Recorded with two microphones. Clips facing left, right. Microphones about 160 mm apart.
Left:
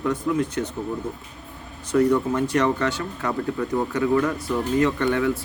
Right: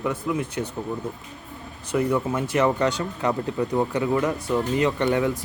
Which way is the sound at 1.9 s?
10° right (ahead or behind).